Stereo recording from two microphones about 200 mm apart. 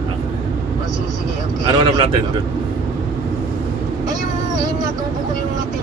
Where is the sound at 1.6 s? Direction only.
25° right (ahead or behind).